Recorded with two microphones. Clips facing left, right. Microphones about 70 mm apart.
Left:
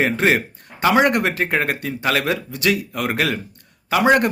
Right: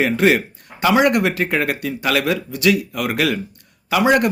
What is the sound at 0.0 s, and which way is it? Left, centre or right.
Speech, left.